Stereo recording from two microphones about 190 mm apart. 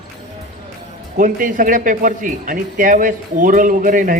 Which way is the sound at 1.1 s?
45° right (ahead or behind).